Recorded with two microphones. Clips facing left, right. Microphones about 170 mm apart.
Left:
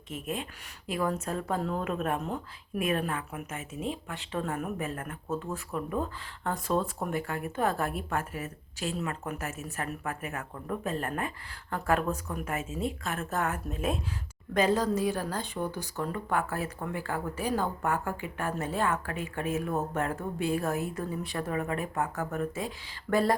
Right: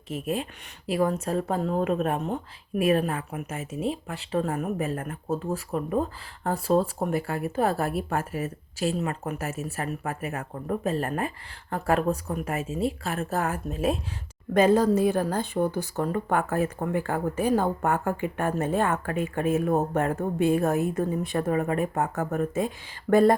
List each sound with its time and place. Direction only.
0.1 s a woman's voice: 35° right (ahead or behind)
14.5 s speech: 50° right (ahead or behind)